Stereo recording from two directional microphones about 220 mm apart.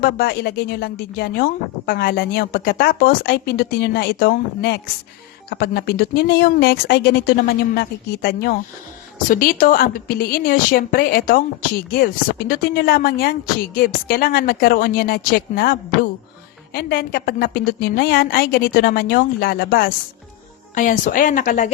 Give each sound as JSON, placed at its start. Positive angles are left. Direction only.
{"t": 0.0, "sound": "speech", "side_deg": 45}